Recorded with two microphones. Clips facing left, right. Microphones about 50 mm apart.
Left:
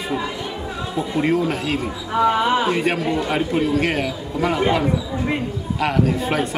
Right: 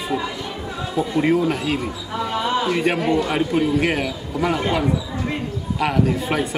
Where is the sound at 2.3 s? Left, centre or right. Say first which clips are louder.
Left 3 dB; left.